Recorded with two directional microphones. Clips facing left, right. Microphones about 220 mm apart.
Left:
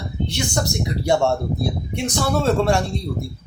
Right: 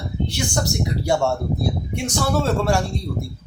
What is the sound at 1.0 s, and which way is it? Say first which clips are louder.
Speech: left 2 dB; 20° left (ahead or behind).